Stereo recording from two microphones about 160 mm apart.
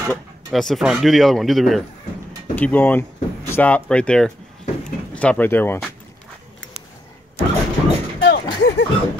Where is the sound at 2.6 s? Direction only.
10° left (ahead or behind).